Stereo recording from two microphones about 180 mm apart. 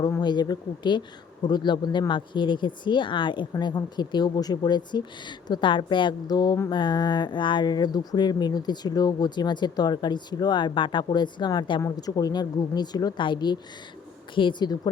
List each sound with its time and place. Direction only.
0.0 s a woman's voice: 25° left (ahead or behind)